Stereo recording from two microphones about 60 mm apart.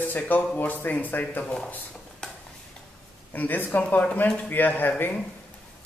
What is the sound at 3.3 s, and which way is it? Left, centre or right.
Speech, left.